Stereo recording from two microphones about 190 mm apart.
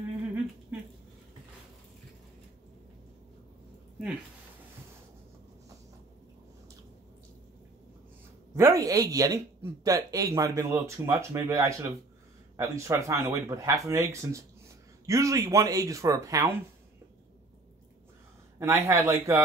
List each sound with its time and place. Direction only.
8.5 s speech: 15° right (ahead or behind)
18.6 s speech: 15° right (ahead or behind)